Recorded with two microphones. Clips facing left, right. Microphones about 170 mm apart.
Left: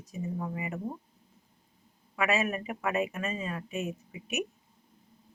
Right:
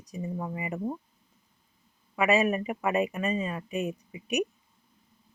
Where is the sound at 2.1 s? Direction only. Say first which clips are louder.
Right 5 dB; centre (ahead or behind).